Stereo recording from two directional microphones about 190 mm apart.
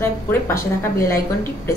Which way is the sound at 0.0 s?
15° left (ahead or behind).